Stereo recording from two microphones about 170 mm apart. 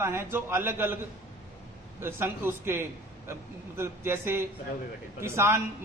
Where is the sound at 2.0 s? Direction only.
15° right (ahead or behind).